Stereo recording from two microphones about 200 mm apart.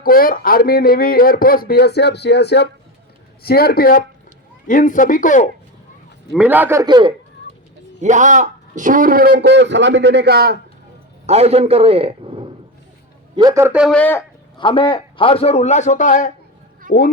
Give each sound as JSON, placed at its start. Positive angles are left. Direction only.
{"t": 0.0, "sound": "a man's voice", "side_deg": 45}
{"t": 6.3, "sound": "a man's voice", "side_deg": -5}
{"t": 6.8, "sound": "a man's voice", "side_deg": -20}
{"t": 8.0, "sound": "a man's voice", "side_deg": -40}
{"t": 11.3, "sound": "a man's voice", "side_deg": -30}
{"t": 13.9, "sound": "speech", "side_deg": 10}
{"t": 14.6, "sound": "a man's voice", "side_deg": 25}
{"t": 16.9, "sound": "speech", "side_deg": -40}